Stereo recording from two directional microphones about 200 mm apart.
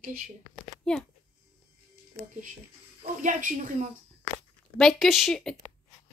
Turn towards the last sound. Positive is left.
turn(degrees=0)  # may be behind; listen again after turning